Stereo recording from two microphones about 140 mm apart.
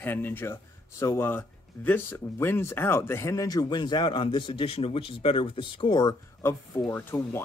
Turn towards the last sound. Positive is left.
turn(degrees=15)  # may be behind; listen again after turning